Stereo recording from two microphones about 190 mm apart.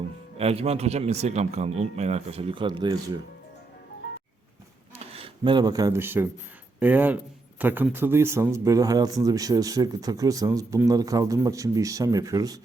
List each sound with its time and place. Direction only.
0.3 s speech: 30° right (ahead or behind)
5.1 s speech: 30° right (ahead or behind)